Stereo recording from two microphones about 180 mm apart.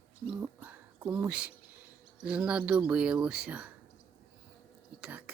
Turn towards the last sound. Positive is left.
turn(degrees=-10)  # may be behind; listen again after turning